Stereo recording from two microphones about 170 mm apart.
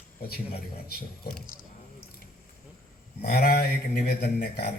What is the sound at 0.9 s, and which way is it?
Mantra, 65° left (ahead or behind).